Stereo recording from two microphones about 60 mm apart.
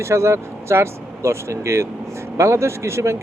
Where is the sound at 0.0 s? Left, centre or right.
Right.